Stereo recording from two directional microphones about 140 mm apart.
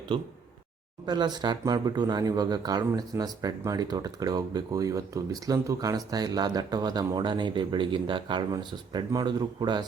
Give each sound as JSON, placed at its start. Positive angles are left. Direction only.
{"t": 0.1, "sound": "speech", "side_deg": -35}